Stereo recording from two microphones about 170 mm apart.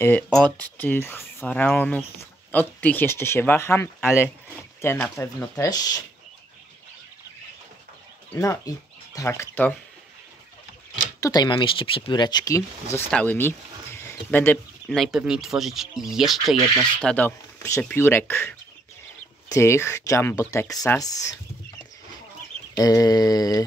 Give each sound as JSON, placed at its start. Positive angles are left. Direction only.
{"t": 0.3, "sound": "speech", "side_deg": 5}
{"t": 5.1, "sound": "speech", "side_deg": 20}
{"t": 8.4, "sound": "speech", "side_deg": 20}
{"t": 11.1, "sound": "speech", "side_deg": 20}
{"t": 19.5, "sound": "speech", "side_deg": 15}
{"t": 22.8, "sound": "speech", "side_deg": 20}